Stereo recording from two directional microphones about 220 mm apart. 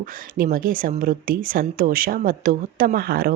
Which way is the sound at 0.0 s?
40° right (ahead or behind).